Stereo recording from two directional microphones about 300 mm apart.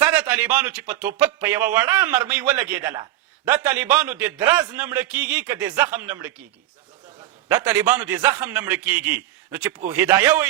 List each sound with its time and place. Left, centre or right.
0.0 s a man's voice: centre
7.4 s a man's voice: centre